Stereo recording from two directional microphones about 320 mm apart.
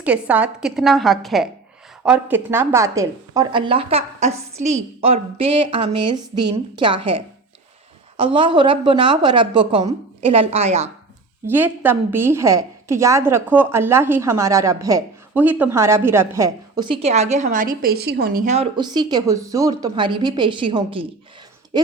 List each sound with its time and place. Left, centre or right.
0.0 s a woman's voice: centre
11.4 s a woman's voice: centre